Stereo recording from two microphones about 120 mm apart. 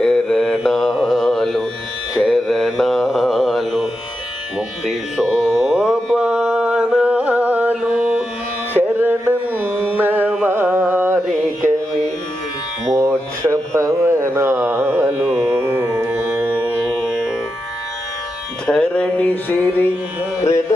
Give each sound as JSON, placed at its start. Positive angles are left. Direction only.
{"t": 0.0, "sound": "mantra", "side_deg": 5}
{"t": 4.9, "sound": "music", "side_deg": 0}
{"t": 8.7, "sound": "carnatic music", "side_deg": -15}
{"t": 12.9, "sound": "a sound", "side_deg": -25}
{"t": 18.6, "sound": "music", "side_deg": 10}